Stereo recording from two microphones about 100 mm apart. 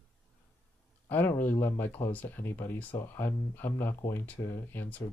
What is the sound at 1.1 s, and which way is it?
Speech, 20° left (ahead or behind).